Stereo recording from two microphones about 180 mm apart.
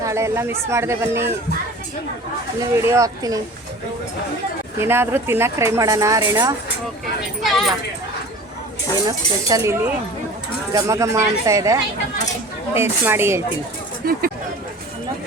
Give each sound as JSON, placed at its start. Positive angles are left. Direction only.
{"t": 0.0, "sound": "speech", "side_deg": -15}
{"t": 2.6, "sound": "speech", "side_deg": -15}
{"t": 4.8, "sound": "speech", "side_deg": -15}
{"t": 9.0, "sound": "speech", "side_deg": -20}
{"t": 14.0, "sound": "speech", "side_deg": -55}